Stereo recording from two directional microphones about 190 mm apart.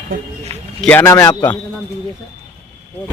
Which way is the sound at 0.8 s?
10° left (ahead or behind).